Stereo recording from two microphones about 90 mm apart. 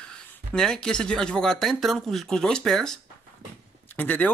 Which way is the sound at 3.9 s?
20° left (ahead or behind).